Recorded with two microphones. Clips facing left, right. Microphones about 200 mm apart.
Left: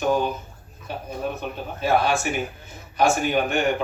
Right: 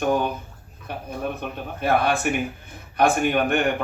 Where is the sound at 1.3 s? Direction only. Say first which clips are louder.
Even; 55° right (ahead or behind).